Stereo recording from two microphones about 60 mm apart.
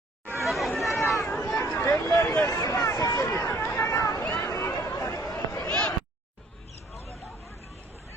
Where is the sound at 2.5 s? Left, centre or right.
Left.